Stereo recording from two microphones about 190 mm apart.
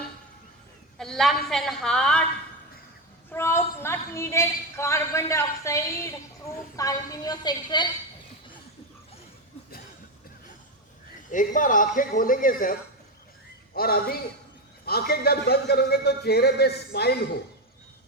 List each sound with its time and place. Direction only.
0.9 s a woman's voice: centre (ahead or behind)
3.3 s a woman's voice: 15° left (ahead or behind)
11.3 s a man's voice: 45° left (ahead or behind)
13.7 s a man's voice: 50° left (ahead or behind)